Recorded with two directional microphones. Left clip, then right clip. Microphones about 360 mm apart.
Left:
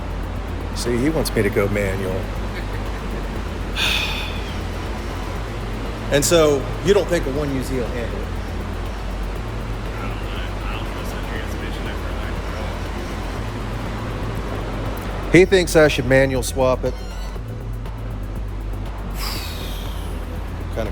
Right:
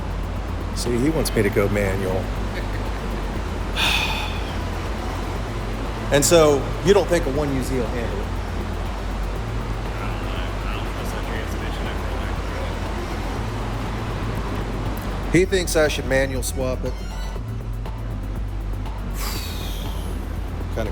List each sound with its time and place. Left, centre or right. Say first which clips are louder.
1.0 s speech: even; centre
3.8 s gasp: even; centre
6.1 s speech: even; centre
15.3 s speech: left 6 dB; left